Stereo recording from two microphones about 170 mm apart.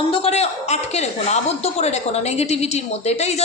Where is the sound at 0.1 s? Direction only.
35° left (ahead or behind).